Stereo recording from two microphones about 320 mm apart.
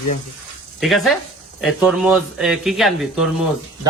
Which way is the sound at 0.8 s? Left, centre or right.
Centre.